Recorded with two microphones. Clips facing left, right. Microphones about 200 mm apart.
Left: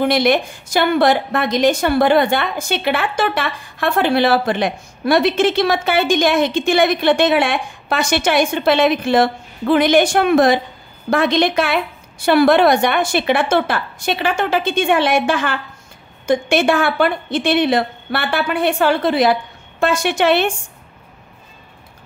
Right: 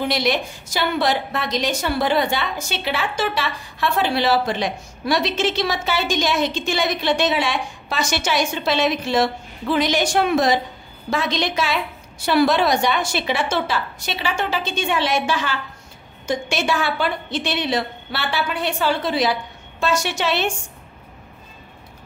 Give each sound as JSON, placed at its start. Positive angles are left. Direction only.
{"t": 0.0, "sound": "a woman's voice", "side_deg": 55}